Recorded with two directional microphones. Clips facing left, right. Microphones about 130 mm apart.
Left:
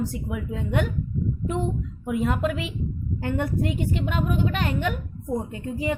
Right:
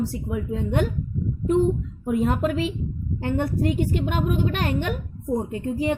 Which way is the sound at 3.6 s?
45° right (ahead or behind).